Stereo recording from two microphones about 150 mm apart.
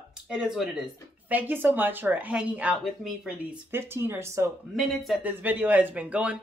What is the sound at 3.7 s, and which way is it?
Speech, 15° right (ahead or behind).